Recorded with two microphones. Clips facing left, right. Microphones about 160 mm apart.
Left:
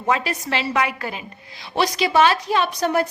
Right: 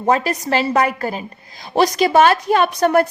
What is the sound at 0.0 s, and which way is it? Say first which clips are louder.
A woman's voice: right 5 dB; 40° right (ahead or behind).